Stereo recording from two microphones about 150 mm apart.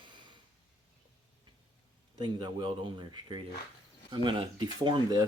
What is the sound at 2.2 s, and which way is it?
Speech, 30° right (ahead or behind).